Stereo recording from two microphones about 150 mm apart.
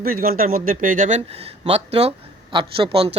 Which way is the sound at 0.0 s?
70° right (ahead or behind).